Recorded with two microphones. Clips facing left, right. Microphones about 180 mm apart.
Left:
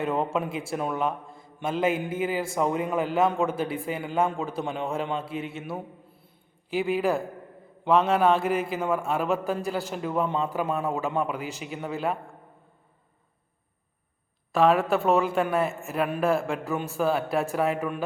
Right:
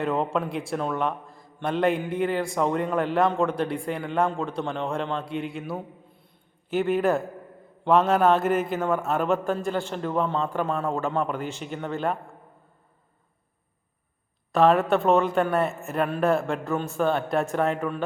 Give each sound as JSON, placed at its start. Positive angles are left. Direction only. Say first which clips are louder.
{"t": 0.0, "sound": "a man's voice", "louder": "right 1 dB", "side_deg": 0}
{"t": 14.5, "sound": "a man's voice", "louder": "right 2 dB", "side_deg": 0}